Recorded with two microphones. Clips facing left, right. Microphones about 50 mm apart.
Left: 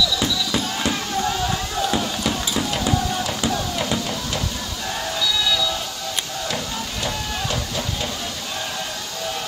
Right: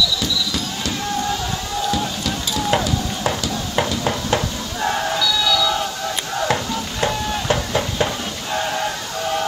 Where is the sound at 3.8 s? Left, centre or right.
Right.